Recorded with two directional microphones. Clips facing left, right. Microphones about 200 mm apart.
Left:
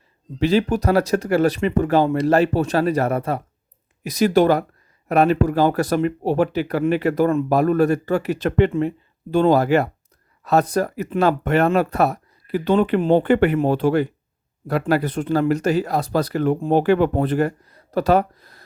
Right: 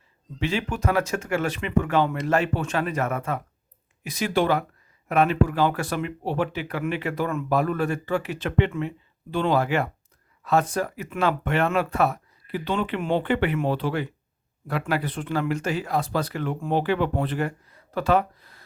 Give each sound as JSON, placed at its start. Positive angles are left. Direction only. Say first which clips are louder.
{"t": 0.3, "sound": "speech", "louder": "left 9 dB", "side_deg": 35}